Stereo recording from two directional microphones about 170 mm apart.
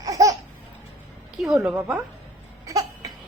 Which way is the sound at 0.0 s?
20° right (ahead or behind).